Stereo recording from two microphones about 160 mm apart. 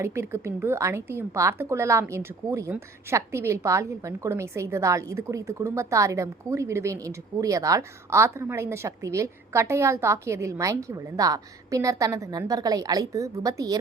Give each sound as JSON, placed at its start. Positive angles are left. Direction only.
{"t": 0.0, "sound": "a woman's voice", "side_deg": -15}